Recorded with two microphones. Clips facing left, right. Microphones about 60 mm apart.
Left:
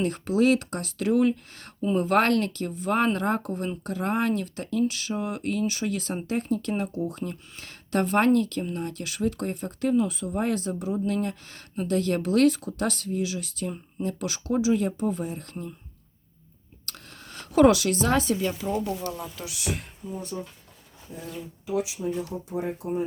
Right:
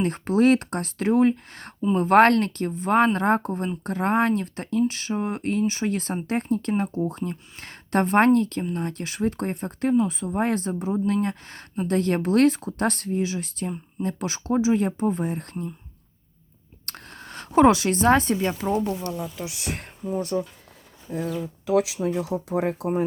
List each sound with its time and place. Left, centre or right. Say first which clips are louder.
0.0 s speech: right 3 dB; right
16.8 s a woman's voice: right 4 dB; right
19.2 s speech: right 2 dB; right
19.7 s speech: right 4 dB; right
20.1 s speech: right 9 dB; right
21.7 s speech: right 6 dB; right